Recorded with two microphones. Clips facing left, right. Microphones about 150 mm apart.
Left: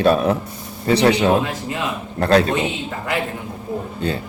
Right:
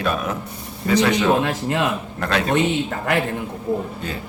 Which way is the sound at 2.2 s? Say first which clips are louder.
Left 8 dB; 35° left (ahead or behind).